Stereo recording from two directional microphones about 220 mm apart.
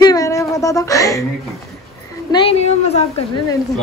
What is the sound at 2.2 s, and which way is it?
Speech, 25° left (ahead or behind).